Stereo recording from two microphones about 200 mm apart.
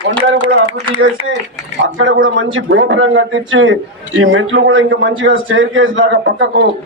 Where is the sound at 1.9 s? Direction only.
75° right (ahead or behind).